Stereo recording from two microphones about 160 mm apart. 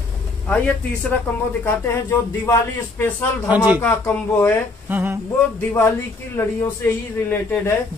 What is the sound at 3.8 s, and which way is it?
Speech, 10° left (ahead or behind).